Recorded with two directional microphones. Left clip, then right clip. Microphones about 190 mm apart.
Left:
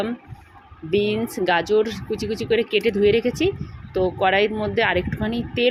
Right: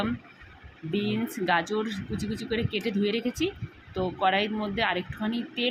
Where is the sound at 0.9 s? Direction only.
30° left (ahead or behind).